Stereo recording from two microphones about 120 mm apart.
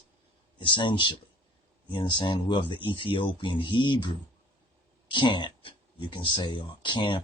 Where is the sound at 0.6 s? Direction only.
40° left (ahead or behind).